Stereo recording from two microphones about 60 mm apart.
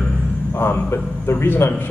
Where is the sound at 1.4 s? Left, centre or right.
Left.